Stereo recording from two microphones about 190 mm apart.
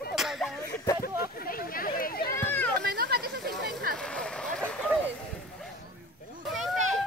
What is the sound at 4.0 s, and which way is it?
Vehicle, 5° left (ahead or behind).